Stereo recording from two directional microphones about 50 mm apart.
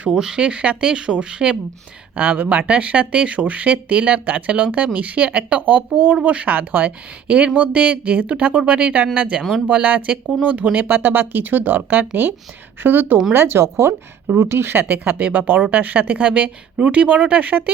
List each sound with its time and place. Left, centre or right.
0.1 s speech: centre
2.1 s speech: right
7.3 s speech: right
10.8 s speech: right
13.3 s speech: right
15.2 s speech: right